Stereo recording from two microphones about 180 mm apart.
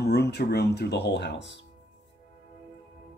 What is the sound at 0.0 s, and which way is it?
Speech, 65° left (ahead or behind).